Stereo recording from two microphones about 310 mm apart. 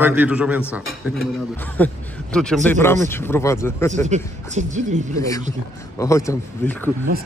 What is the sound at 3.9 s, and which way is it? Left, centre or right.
Speech, right.